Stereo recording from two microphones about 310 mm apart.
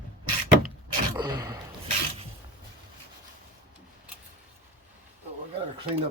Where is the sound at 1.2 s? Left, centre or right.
Centre.